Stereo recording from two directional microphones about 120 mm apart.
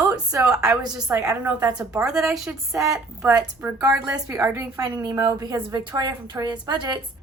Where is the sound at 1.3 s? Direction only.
30° right (ahead or behind).